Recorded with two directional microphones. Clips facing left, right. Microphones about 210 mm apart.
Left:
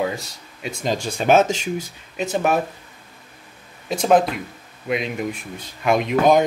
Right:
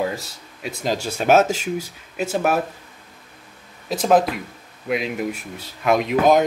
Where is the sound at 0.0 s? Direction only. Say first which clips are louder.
Even; centre (ahead or behind).